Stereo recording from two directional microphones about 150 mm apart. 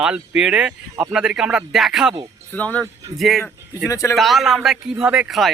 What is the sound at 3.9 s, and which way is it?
Speech, 20° left (ahead or behind).